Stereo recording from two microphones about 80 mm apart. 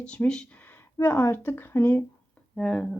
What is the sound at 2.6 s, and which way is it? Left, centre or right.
Speech, centre.